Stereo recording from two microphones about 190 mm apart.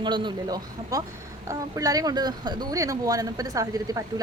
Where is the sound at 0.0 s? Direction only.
25° right (ahead or behind).